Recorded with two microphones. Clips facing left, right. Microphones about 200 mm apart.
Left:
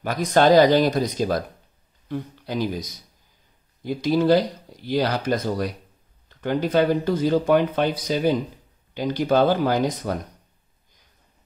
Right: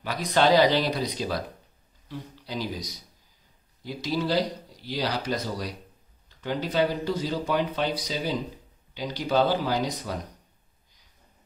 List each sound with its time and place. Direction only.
0.0 s a man's voice: 50° left (ahead or behind)